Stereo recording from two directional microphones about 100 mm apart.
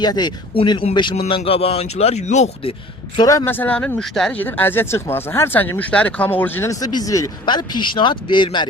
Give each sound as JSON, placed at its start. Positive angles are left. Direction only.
{"t": 0.0, "sound": "speech", "side_deg": 45}
{"t": 0.5, "sound": "speech", "side_deg": 55}
{"t": 1.1, "sound": "speech", "side_deg": 80}
{"t": 3.4, "sound": "speech", "side_deg": 20}
{"t": 4.4, "sound": "speech", "side_deg": 20}
{"t": 6.7, "sound": "speech", "side_deg": 40}
{"t": 7.4, "sound": "speech", "side_deg": 50}